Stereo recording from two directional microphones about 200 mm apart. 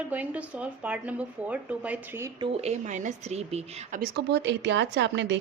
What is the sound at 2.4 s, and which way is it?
Speech, 30° right (ahead or behind).